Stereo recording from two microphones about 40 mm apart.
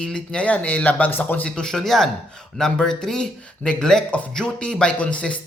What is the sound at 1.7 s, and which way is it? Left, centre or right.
Speech, centre.